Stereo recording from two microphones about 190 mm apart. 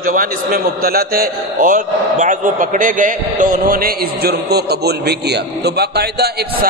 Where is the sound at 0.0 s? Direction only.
45° right (ahead or behind).